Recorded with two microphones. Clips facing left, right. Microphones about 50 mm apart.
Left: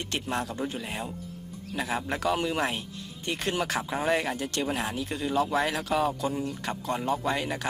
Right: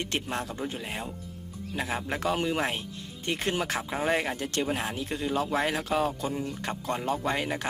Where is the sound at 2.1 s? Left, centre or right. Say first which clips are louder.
Even; right.